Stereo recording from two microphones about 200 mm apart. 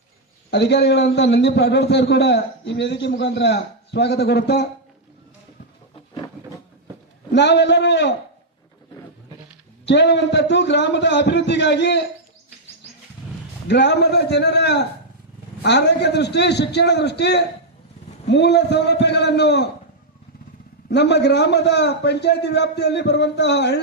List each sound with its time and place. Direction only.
0.5 s a man's voice: 55° left (ahead or behind)
7.3 s a man's voice: 60° left (ahead or behind)
9.8 s a man's voice: 60° left (ahead or behind)
13.7 s a man's voice: 60° left (ahead or behind)
20.9 s a man's voice: 55° left (ahead or behind)